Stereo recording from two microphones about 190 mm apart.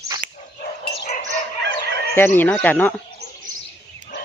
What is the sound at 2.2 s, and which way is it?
Speech, 10° left (ahead or behind).